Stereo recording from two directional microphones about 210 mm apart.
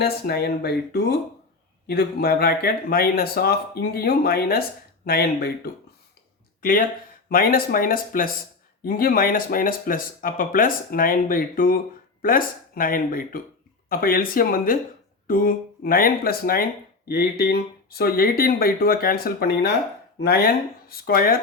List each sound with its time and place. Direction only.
0.0 s speech: 50° left (ahead or behind)
6.6 s speech: 40° left (ahead or behind)